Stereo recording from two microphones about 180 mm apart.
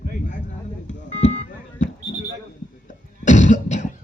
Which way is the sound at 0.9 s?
40° left (ahead or behind).